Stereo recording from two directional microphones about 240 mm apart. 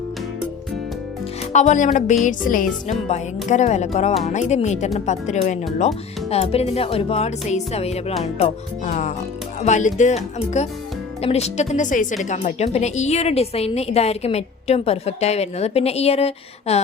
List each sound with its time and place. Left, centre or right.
1.5 s a woman's voice: left